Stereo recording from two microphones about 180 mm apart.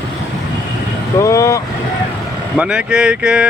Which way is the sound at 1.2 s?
15° left (ahead or behind).